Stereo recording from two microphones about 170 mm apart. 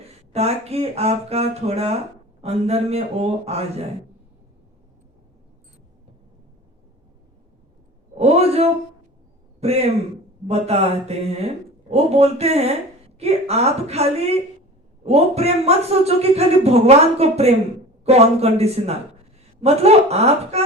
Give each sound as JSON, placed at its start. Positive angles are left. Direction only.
{"t": 0.3, "sound": "a woman's voice", "side_deg": -40}
{"t": 8.2, "sound": "a woman's voice", "side_deg": -35}